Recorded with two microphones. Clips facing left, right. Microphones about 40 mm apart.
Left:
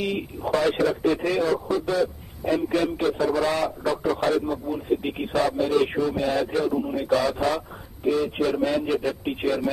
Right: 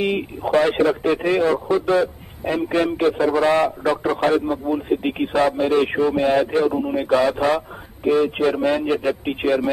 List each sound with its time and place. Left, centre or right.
0.0 s a man's voice: right